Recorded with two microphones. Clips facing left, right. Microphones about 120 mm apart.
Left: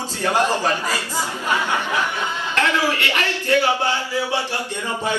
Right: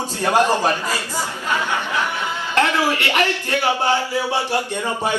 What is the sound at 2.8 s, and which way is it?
A man's voice, 15° right (ahead or behind).